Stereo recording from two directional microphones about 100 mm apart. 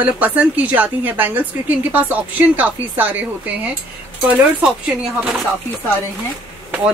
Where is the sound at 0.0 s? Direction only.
15° right (ahead or behind).